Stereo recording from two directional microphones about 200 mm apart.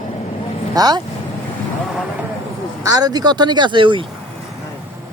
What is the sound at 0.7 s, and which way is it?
Speech, 20° right (ahead or behind).